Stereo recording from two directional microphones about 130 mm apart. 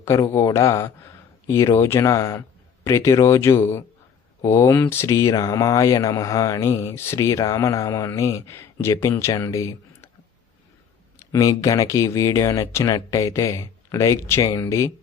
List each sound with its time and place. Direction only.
0.0 s speech: 20° left (ahead or behind)
11.3 s speech: 25° left (ahead or behind)